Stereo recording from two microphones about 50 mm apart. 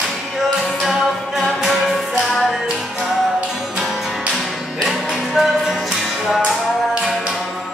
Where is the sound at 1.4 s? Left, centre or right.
Centre.